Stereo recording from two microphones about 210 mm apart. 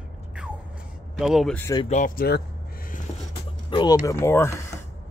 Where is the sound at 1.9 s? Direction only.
40° left (ahead or behind).